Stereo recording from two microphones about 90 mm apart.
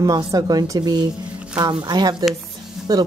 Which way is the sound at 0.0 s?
40° right (ahead or behind).